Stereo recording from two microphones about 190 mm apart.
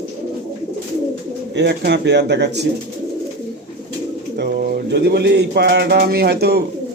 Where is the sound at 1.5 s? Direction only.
60° right (ahead or behind).